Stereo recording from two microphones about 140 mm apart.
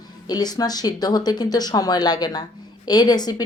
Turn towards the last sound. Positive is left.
turn(degrees=30)  # may be behind; listen again after turning